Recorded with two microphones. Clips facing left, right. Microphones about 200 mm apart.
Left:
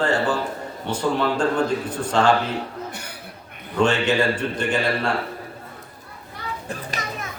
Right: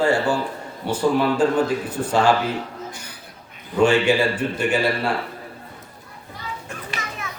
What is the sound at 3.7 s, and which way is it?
A man's voice, 10° right (ahead or behind).